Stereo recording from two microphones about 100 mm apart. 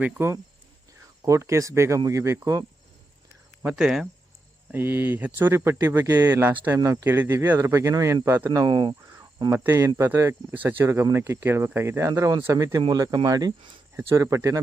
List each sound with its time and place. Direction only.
0.0 s speech: 25° right (ahead or behind)
3.8 s speech: 5° right (ahead or behind)
4.7 s speech: 20° right (ahead or behind)
6.7 s speech: 30° right (ahead or behind)
8.4 s speech: 45° right (ahead or behind)
9.5 s speech: 25° right (ahead or behind)
10.8 s speech: 30° right (ahead or behind)